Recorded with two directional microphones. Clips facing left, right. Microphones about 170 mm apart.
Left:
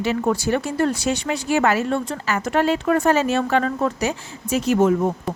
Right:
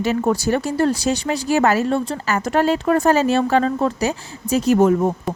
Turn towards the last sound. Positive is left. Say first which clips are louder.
# right 2 dB
turn(degrees=-35)  # may be behind; listen again after turning